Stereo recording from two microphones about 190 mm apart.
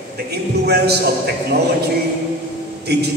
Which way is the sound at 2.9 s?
60° right (ahead or behind).